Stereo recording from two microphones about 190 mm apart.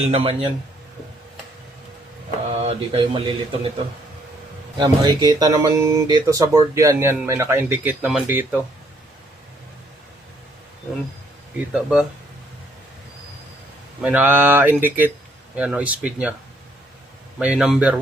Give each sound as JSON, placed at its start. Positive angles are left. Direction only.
{"t": 0.0, "sound": "speech", "side_deg": -30}
{"t": 2.6, "sound": "speech", "side_deg": -30}
{"t": 4.8, "sound": "speech", "side_deg": -20}
{"t": 11.7, "sound": "speech", "side_deg": -5}
{"t": 14.0, "sound": "speech", "side_deg": -10}
{"t": 17.4, "sound": "speech", "side_deg": -5}